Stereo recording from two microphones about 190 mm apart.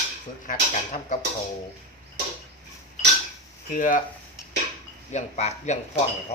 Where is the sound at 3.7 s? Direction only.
45° left (ahead or behind).